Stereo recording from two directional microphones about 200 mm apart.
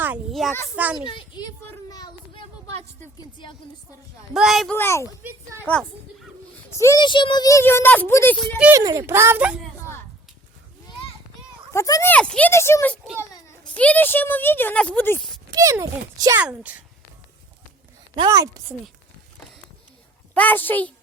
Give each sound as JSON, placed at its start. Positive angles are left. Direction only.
{"t": 0.0, "sound": "a child's voice", "side_deg": -5}
{"t": 1.0, "sound": "a child's voice", "side_deg": 25}
{"t": 3.2, "sound": "a child's voice", "side_deg": 20}
{"t": 4.4, "sound": "a child's voice", "side_deg": 0}
{"t": 5.2, "sound": "speech", "side_deg": -10}
{"t": 5.6, "sound": "a child's voice", "side_deg": 5}
{"t": 6.7, "sound": "a child's voice", "side_deg": 15}
{"t": 8.5, "sound": "speech", "side_deg": -5}
{"t": 8.8, "sound": "speech", "side_deg": -15}
{"t": 11.7, "sound": "a child's voice", "side_deg": 15}
{"t": 15.4, "sound": "speech", "side_deg": -15}
{"t": 16.4, "sound": "speech", "side_deg": -5}
{"t": 18.2, "sound": "speech", "side_deg": -15}
{"t": 20.3, "sound": "a child's voice", "side_deg": 10}